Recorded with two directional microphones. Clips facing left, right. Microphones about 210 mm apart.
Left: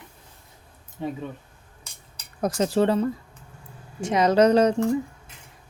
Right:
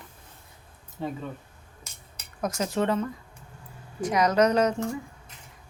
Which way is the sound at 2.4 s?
30° left (ahead or behind).